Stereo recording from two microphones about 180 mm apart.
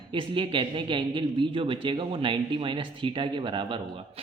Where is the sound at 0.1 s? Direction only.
30° right (ahead or behind).